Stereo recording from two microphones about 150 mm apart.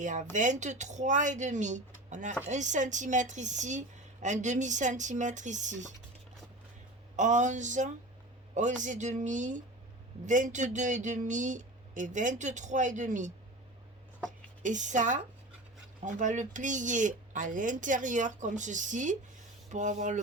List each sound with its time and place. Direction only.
0.0 s a woman's voice: 55° right (ahead or behind)
7.2 s speech: 55° right (ahead or behind)
14.6 s speech: 55° right (ahead or behind)